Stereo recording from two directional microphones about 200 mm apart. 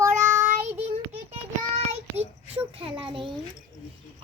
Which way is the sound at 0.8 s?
35° right (ahead or behind).